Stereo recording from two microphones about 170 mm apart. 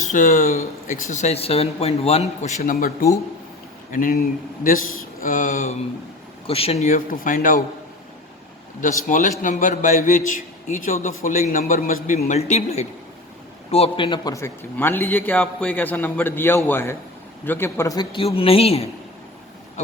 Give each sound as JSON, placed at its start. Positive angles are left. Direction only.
{"t": 0.1, "sound": "speech", "side_deg": 50}
{"t": 3.9, "sound": "a man's voice", "side_deg": 55}
{"t": 8.8, "sound": "a man's voice", "side_deg": 50}
{"t": 14.3, "sound": "a man's voice", "side_deg": 15}